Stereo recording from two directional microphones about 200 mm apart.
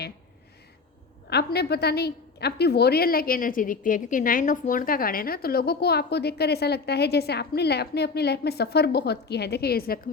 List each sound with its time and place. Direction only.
1.3 s a woman's voice: 55° left (ahead or behind)